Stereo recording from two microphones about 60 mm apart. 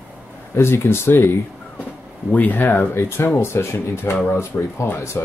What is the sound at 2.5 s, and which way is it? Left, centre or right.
Speech, left.